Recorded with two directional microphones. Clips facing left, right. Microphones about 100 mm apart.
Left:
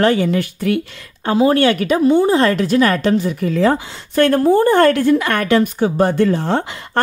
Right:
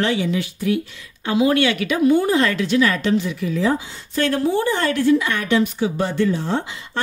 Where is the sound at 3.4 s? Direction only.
70° left (ahead or behind).